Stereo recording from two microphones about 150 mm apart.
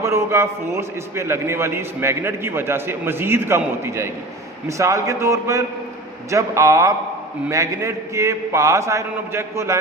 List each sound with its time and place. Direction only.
0.0 s a man's voice: 20° right (ahead or behind)